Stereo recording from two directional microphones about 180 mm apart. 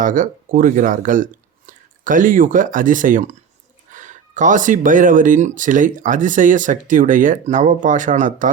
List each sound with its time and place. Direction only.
0.0 s speech: 50° right (ahead or behind)